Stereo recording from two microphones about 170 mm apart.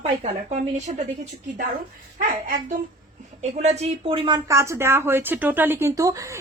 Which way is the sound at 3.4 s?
40° right (ahead or behind).